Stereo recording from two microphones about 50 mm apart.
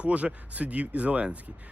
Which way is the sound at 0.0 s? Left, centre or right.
Right.